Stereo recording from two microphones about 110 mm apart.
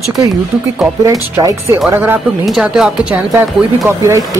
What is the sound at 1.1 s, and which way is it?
Speech, 30° right (ahead or behind).